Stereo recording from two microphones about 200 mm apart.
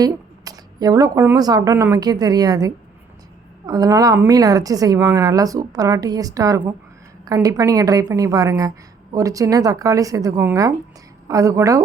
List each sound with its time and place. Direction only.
0.0 s a woman's voice: 20° right (ahead or behind)